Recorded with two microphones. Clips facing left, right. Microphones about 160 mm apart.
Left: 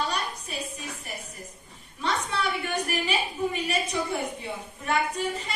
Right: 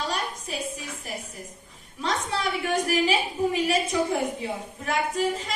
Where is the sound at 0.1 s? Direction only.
90° right.